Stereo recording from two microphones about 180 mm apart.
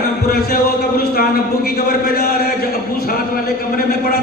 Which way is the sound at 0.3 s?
60° left (ahead or behind).